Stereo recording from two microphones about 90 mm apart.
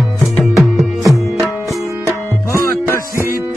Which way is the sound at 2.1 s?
30° left (ahead or behind).